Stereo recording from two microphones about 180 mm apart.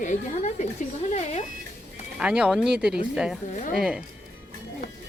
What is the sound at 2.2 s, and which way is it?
Speech, 5° right (ahead or behind).